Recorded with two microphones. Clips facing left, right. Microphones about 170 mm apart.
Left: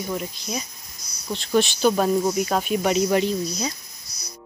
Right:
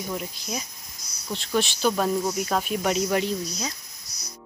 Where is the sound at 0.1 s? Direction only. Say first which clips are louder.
Left 3 dB; centre (ahead or behind).